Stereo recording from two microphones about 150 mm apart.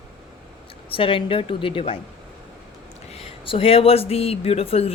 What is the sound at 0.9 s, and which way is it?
Speech, 35° left (ahead or behind).